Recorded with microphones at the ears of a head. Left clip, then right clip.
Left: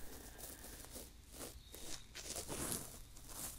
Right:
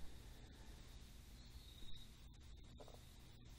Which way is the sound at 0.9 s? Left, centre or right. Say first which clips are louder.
Left 11 dB; left.